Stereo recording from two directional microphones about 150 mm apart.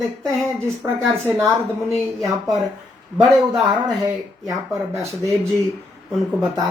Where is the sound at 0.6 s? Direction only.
20° right (ahead or behind).